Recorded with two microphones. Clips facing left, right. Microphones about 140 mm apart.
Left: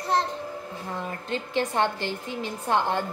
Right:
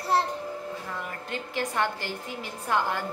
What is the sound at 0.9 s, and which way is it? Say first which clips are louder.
A woman's voice: left 4 dB; 25° left (ahead or behind).